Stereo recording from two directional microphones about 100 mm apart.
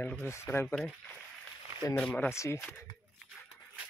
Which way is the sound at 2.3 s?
25° left (ahead or behind).